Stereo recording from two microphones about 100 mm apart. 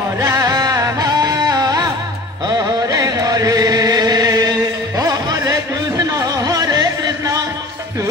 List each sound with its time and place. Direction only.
0.2 s music: 35° right (ahead or behind)